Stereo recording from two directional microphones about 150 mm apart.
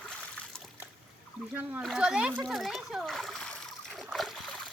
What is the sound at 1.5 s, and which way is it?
Speech, 10° right (ahead or behind).